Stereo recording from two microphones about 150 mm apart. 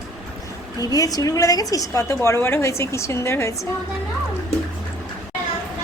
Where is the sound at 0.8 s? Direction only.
25° left (ahead or behind).